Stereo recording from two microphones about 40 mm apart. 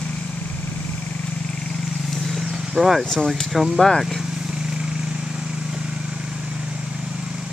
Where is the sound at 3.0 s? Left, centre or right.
Centre.